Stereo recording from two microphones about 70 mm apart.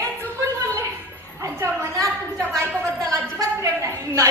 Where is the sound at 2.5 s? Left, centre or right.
Right.